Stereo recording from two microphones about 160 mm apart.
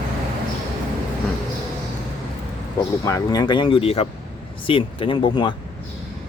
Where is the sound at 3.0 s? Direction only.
20° left (ahead or behind).